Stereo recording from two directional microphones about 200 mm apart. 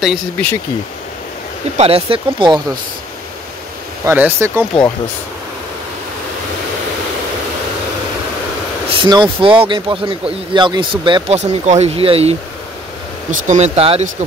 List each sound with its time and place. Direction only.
0.0 s speech: centre (ahead or behind)
1.8 s speech: 30° right (ahead or behind)
4.0 s speech: 10° right (ahead or behind)
9.0 s speech: 20° right (ahead or behind)